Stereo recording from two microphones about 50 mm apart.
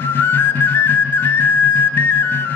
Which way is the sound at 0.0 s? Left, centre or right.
Left.